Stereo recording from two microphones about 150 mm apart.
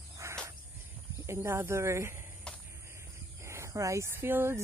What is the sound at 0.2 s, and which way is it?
Cricket, 20° right (ahead or behind).